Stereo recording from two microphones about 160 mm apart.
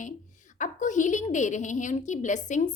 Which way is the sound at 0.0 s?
50° left (ahead or behind).